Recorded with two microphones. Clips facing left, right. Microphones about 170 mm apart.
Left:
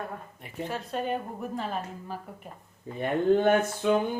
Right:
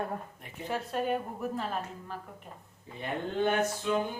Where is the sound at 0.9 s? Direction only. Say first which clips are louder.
Left 1 dB; 5° right (ahead or behind).